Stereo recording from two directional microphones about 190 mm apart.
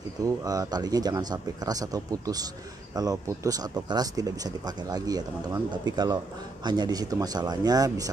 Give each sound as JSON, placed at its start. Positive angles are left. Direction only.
{"t": 0.2, "sound": "speech", "side_deg": -20}